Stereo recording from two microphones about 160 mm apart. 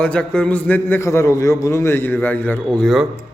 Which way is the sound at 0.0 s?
5° left (ahead or behind).